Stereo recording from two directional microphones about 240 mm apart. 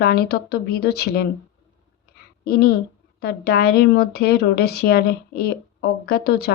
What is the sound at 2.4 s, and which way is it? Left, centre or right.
A woman's voice, left.